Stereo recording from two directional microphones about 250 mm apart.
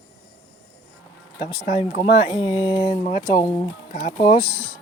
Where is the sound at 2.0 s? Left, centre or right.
Centre.